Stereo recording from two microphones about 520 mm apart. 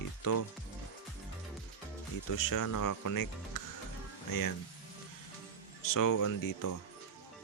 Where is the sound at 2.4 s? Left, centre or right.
Left.